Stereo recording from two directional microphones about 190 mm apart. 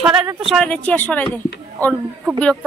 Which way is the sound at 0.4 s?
Centre (ahead or behind).